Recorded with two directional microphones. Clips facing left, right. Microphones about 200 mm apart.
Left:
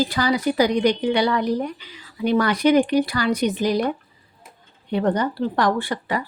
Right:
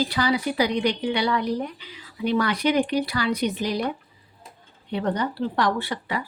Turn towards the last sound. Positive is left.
turn(degrees=45)  # may be behind; listen again after turning